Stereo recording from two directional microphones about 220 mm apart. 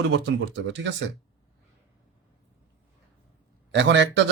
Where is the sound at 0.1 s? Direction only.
55° right (ahead or behind).